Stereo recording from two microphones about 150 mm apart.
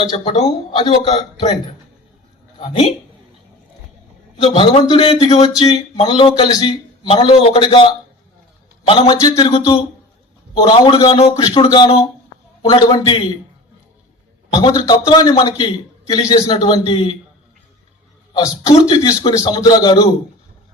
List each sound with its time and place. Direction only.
0.3 s speech: 45° left (ahead or behind)
2.6 s speech: 40° left (ahead or behind)
4.5 s speech: 35° left (ahead or behind)
8.9 s speech: 35° left (ahead or behind)
9.1 s a man's voice: 20° left (ahead or behind)
9.4 s speech: 35° left (ahead or behind)
14.5 s a man's voice: 30° left (ahead or behind)
18.3 s a man's voice: 20° left (ahead or behind)